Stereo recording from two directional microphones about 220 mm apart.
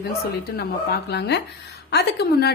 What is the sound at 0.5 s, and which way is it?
A woman's voice, 45° left (ahead or behind).